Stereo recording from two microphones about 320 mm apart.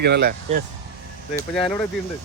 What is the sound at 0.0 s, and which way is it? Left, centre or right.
Speech, right.